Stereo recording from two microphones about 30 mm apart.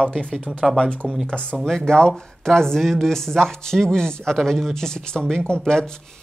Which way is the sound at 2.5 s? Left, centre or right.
Centre.